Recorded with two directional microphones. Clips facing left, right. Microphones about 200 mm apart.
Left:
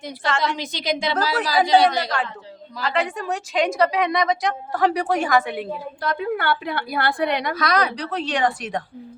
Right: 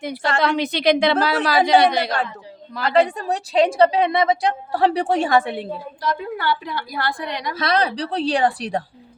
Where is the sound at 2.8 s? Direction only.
60° right (ahead or behind).